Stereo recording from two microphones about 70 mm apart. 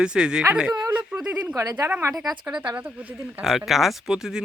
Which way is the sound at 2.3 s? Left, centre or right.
Centre.